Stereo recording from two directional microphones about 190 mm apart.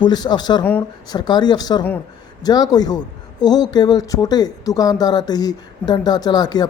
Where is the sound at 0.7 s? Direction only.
10° left (ahead or behind).